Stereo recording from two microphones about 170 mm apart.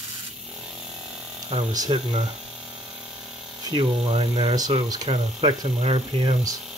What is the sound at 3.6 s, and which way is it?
Speech, 30° right (ahead or behind).